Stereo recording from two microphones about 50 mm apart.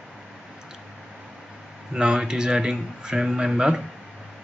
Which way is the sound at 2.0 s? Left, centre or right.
Centre.